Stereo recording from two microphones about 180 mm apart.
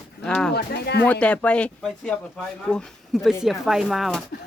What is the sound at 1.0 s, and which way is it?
Speech, 10° left (ahead or behind).